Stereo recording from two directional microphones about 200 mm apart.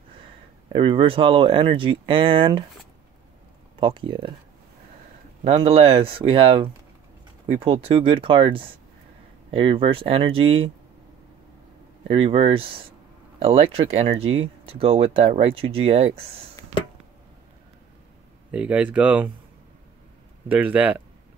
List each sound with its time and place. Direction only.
0.7 s speech: 25° right (ahead or behind)
3.8 s speech: 25° right (ahead or behind)
5.4 s speech: 30° right (ahead or behind)
12.1 s speech: 30° right (ahead or behind)
18.5 s speech: 5° right (ahead or behind)
20.4 s speech: 5° right (ahead or behind)